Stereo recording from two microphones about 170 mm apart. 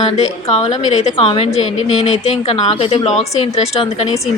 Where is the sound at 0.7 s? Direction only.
45° left (ahead or behind).